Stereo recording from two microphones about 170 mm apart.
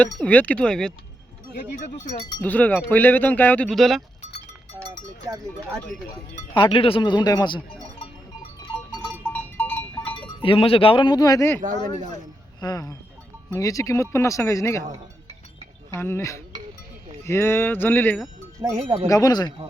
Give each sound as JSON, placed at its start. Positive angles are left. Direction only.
{"t": 0.0, "sound": "speech", "side_deg": 10}
{"t": 1.7, "sound": "speech", "side_deg": 45}
{"t": 2.4, "sound": "speech", "side_deg": 10}
{"t": 6.5, "sound": "speech", "side_deg": 30}
{"t": 9.0, "sound": "sheep", "side_deg": 10}
{"t": 10.2, "sound": "speech", "side_deg": 30}
{"t": 16.0, "sound": "speech", "side_deg": 15}
{"t": 18.6, "sound": "speech", "side_deg": -30}
{"t": 19.0, "sound": "speech", "side_deg": 20}